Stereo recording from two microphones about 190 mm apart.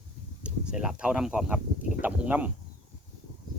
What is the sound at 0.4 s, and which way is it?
Speech, 5° right (ahead or behind).